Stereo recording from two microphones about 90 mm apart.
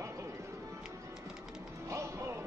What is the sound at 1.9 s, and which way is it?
Music, 35° right (ahead or behind).